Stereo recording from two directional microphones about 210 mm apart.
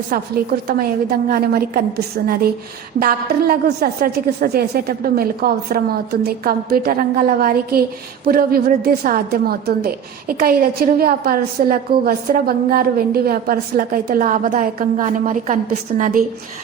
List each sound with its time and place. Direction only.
1.3 s a woman's voice: 45° right (ahead or behind)